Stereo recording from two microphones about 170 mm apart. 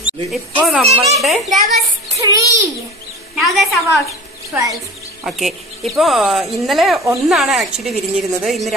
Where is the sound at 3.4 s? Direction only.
Centre (ahead or behind).